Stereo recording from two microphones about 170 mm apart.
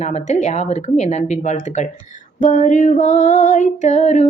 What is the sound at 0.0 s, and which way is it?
Female singing, 45° left (ahead or behind).